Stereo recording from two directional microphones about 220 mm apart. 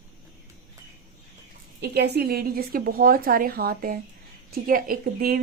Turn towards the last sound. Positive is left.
turn(degrees=-40)  # may be behind; listen again after turning